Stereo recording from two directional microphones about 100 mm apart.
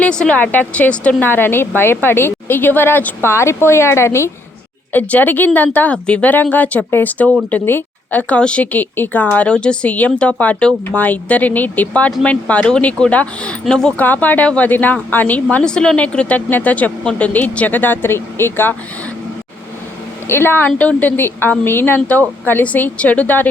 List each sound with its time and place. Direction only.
0.0 s a woman's voice: 10° left (ahead or behind)
20.2 s a woman's voice: 25° left (ahead or behind)